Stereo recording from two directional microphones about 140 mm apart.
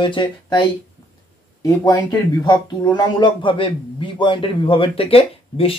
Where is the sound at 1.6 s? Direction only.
30° left (ahead or behind).